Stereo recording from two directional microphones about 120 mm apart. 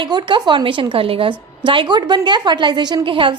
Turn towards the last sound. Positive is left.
turn(degrees=-45)  # may be behind; listen again after turning